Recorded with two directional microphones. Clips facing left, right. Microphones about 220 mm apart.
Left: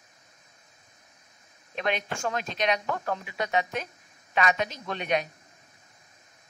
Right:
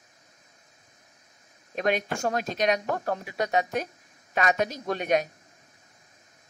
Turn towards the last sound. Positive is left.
turn(degrees=-45)  # may be behind; listen again after turning